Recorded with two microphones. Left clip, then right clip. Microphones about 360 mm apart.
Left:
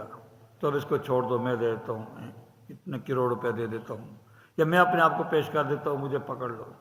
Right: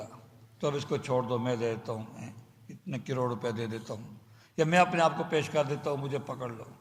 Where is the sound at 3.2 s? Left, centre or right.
Centre.